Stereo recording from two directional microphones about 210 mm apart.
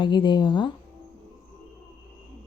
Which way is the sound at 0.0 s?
20° left (ahead or behind).